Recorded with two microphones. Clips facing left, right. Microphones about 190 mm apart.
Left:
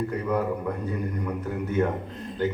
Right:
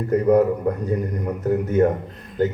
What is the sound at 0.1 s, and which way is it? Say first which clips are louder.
Speech: right 10 dB; 45° right (ahead or behind).